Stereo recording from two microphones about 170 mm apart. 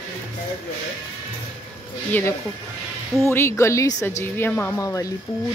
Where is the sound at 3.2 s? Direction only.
15° left (ahead or behind).